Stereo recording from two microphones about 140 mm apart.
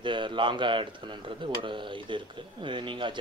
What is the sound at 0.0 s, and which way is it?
Speech, 35° right (ahead or behind).